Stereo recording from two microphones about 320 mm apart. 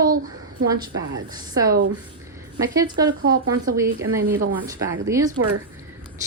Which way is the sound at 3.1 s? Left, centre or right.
Right.